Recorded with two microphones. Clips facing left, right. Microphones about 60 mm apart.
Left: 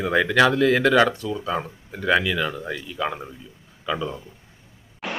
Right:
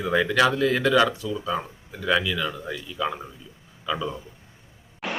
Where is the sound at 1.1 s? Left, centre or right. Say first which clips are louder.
Left 2 dB; left.